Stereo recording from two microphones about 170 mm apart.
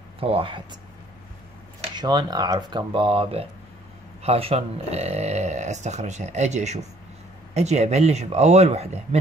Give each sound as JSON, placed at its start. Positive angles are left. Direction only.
{"t": 0.2, "sound": "speech", "side_deg": -35}
{"t": 2.0, "sound": "speech", "side_deg": -25}